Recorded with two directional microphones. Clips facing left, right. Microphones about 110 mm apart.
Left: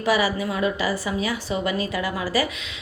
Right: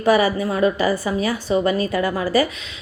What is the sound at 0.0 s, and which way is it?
A woman's voice, 45° right (ahead or behind).